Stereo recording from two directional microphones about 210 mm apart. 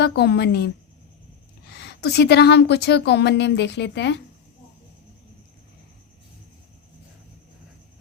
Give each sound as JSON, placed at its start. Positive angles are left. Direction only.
{"t": 0.0, "sound": "a woman's voice", "side_deg": 50}